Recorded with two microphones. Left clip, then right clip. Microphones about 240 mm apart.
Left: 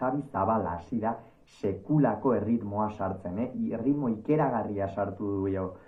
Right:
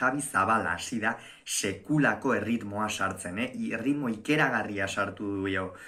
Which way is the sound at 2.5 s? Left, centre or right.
Right.